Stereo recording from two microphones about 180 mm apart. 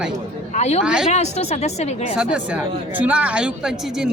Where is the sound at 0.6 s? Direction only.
40° left (ahead or behind).